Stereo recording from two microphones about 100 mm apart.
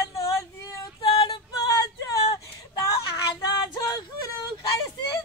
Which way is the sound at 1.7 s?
35° left (ahead or behind).